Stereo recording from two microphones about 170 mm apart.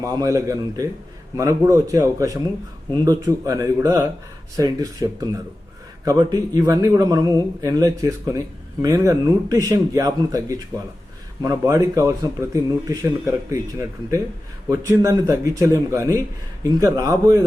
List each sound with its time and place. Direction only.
0.0 s speech: 20° right (ahead or behind)